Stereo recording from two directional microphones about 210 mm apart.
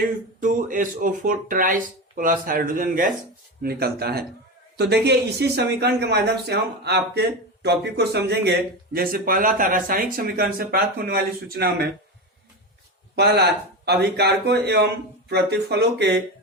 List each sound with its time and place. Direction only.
0.3 s speech: 40° right (ahead or behind)
13.1 s speech: 50° right (ahead or behind)